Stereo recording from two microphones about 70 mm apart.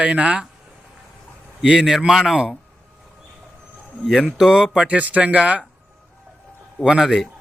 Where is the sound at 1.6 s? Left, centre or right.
Centre.